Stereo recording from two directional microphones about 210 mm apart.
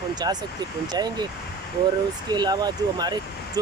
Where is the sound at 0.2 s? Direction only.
20° right (ahead or behind).